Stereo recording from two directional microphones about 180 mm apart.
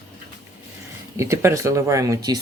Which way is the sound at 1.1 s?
15° right (ahead or behind).